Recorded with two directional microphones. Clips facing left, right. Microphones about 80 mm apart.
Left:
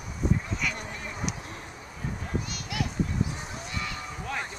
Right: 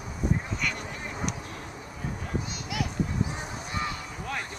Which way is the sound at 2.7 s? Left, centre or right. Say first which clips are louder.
Even; centre.